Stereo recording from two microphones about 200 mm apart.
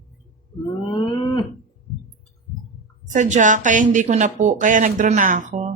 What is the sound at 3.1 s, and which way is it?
A woman's voice, 40° right (ahead or behind).